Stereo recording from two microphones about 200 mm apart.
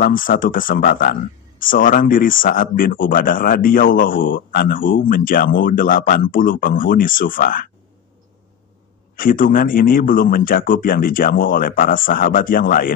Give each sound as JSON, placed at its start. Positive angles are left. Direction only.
{"t": 0.0, "sound": "speech", "side_deg": 45}
{"t": 9.1, "sound": "speech", "side_deg": 45}